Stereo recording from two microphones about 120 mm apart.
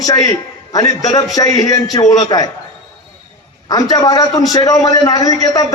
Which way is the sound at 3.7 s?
30° left (ahead or behind).